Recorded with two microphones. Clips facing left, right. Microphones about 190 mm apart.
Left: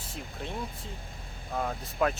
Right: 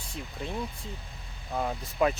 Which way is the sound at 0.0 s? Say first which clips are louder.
Right 1 dB; centre (ahead or behind).